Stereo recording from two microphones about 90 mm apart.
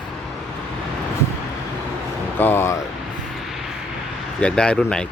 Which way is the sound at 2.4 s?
25° left (ahead or behind).